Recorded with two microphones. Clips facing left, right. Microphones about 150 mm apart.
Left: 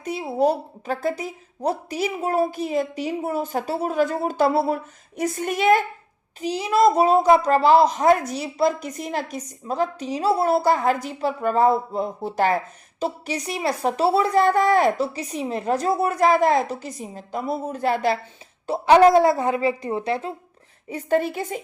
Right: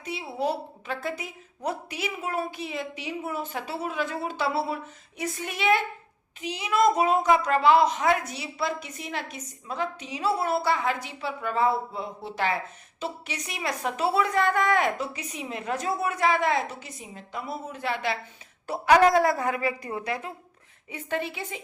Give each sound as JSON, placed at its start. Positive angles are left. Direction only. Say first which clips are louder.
{"t": 0.0, "sound": "a woman's voice", "louder": "left 8 dB", "side_deg": 45}
{"t": 18.7, "sound": "a woman's voice", "louder": "left 5 dB", "side_deg": 25}
{"t": 20.9, "sound": "a woman's voice", "louder": "left 9 dB", "side_deg": 40}